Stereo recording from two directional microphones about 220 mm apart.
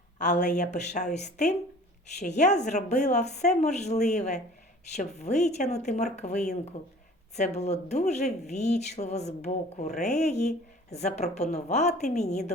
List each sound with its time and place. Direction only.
0.2 s speech: 35° left (ahead or behind)